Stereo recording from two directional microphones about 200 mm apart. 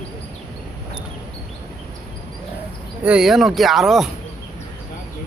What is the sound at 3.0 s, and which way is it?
Speech, 5° right (ahead or behind).